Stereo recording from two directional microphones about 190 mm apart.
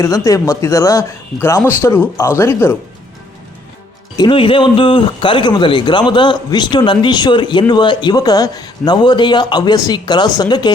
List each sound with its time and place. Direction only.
0.0 s speech: 15° left (ahead or behind)
4.2 s a man's voice: 25° left (ahead or behind)